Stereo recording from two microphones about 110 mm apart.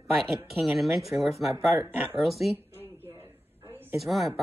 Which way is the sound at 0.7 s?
Centre (ahead or behind).